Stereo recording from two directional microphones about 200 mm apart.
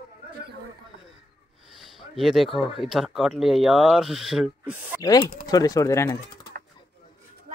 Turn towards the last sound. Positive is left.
turn(degrees=15)  # may be behind; listen again after turning